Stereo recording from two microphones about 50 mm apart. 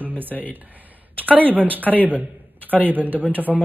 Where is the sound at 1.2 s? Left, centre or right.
Right.